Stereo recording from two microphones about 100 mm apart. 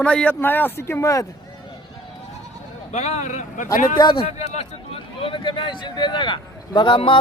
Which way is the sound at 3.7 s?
40° left (ahead or behind).